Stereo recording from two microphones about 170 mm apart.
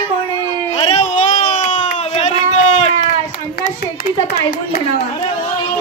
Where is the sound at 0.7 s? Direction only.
45° left (ahead or behind).